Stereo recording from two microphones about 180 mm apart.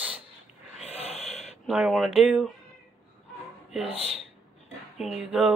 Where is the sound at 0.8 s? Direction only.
35° left (ahead or behind).